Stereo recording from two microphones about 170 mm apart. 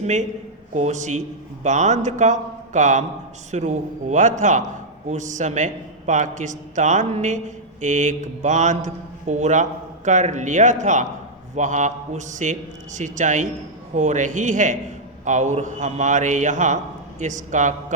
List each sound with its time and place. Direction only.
0.7 s a man's voice: 45° right (ahead or behind)